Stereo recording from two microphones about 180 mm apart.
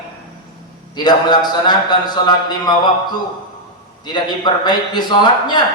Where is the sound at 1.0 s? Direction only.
25° left (ahead or behind).